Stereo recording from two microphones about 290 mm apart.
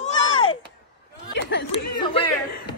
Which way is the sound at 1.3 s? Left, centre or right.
Left.